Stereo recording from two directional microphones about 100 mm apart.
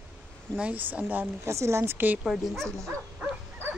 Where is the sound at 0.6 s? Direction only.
15° right (ahead or behind).